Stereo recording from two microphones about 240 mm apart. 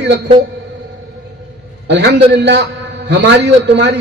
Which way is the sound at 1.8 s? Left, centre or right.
Right.